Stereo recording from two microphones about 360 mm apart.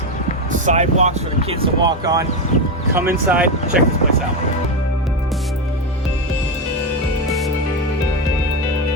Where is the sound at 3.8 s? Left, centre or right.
Centre.